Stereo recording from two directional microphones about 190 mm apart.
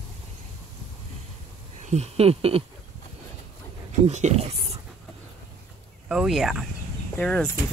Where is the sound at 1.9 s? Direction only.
35° right (ahead or behind).